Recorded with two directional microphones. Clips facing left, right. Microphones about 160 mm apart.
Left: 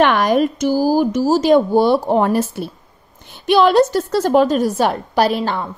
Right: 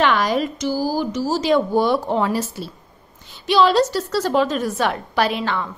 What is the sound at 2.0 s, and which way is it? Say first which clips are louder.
A woman's voice: left 5 dB; 50° left (ahead or behind).